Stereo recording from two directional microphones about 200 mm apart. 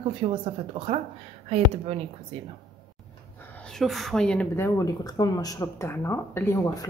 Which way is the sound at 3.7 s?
Centre (ahead or behind).